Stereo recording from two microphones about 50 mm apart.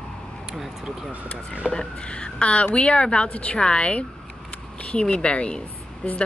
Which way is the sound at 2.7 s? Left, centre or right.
Left.